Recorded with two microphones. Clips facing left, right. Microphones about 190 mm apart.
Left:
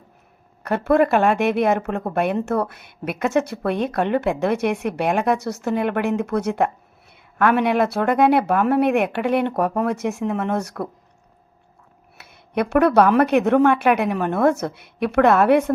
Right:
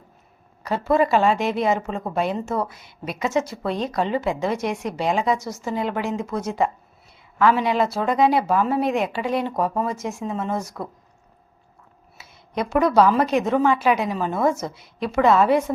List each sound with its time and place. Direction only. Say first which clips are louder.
0.6 s a woman's voice: left 3 dB; 60° left (ahead or behind)
12.1 s a woman's voice: left 4 dB; 60° left (ahead or behind)